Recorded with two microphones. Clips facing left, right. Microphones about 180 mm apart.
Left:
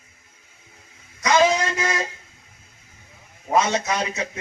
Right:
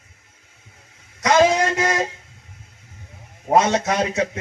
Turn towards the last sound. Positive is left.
turn(degrees=-50)  # may be behind; listen again after turning